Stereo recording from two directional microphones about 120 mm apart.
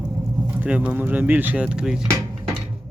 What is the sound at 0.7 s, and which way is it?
Speech, 10° right (ahead or behind).